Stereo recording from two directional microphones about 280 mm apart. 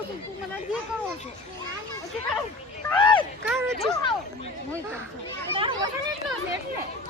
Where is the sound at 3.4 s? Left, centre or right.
Centre.